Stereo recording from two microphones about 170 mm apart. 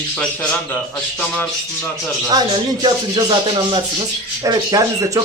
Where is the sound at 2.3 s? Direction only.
25° right (ahead or behind).